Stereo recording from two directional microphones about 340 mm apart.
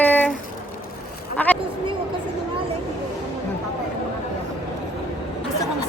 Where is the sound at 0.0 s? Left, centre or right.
Centre.